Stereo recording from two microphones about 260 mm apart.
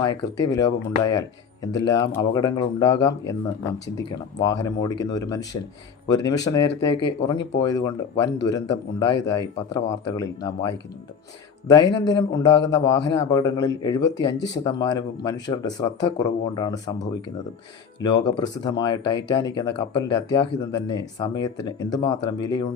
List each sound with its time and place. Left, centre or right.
0.0 s speech: centre
12.0 s speech: centre
12.5 s a man's voice: left
13.0 s speech: centre